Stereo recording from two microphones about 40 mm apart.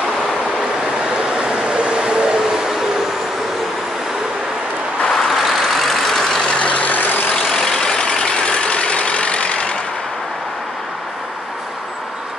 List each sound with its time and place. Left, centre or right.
0.6 s vehicle: centre
5.0 s vehicle: centre
5.3 s vehicle: centre
6.4 s vehicle: left
7.3 s vehicle: centre; by 9.8 s left